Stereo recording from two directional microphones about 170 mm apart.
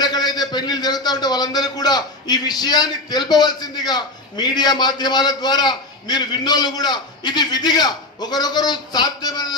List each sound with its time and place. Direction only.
0.0 s a man's voice: 25° left (ahead or behind)